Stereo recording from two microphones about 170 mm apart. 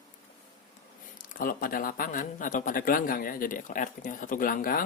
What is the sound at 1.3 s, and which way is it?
Speech, 55° left (ahead or behind).